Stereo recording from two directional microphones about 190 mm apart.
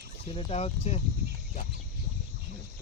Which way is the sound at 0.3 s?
30° left (ahead or behind).